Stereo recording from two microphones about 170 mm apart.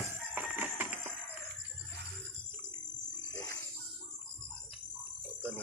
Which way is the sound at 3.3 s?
20° left (ahead or behind).